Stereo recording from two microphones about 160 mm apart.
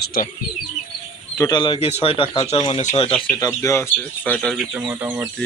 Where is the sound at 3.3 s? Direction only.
20° left (ahead or behind).